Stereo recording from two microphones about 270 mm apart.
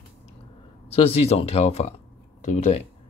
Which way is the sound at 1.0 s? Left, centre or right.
Left.